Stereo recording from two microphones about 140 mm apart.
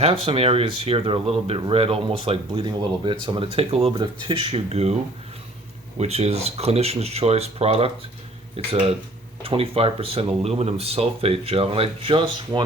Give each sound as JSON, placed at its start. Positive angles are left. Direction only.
{"t": 0.3, "sound": "speech", "side_deg": -45}
{"t": 3.9, "sound": "speech", "side_deg": -35}
{"t": 6.0, "sound": "speech", "side_deg": -50}